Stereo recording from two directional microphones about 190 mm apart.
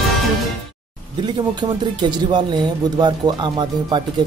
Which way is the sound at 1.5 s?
25° right (ahead or behind).